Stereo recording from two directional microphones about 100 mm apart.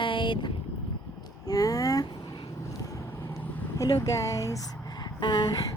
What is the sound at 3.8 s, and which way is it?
Speech, 35° left (ahead or behind).